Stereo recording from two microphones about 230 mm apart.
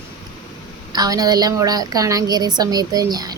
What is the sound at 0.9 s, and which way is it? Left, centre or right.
A woman's voice, centre.